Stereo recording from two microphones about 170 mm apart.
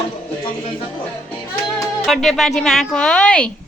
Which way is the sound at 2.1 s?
Centre (ahead or behind).